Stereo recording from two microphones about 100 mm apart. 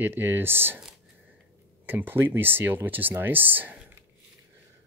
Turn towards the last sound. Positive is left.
turn(degrees=-20)  # may be behind; listen again after turning